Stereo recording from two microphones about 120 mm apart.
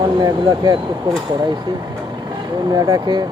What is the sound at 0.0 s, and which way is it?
Speech, 40° right (ahead or behind).